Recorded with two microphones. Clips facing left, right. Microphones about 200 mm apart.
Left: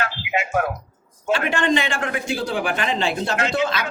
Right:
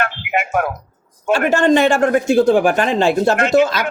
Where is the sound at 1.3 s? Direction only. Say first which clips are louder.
Right 7 dB; 45° right (ahead or behind).